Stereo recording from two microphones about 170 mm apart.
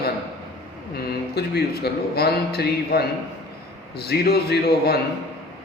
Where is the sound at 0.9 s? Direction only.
65° left (ahead or behind).